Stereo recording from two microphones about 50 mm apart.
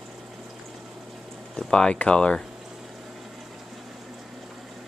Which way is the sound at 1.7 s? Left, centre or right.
Centre.